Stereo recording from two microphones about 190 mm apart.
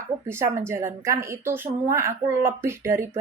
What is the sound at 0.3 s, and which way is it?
A woman's voice, 15° right (ahead or behind).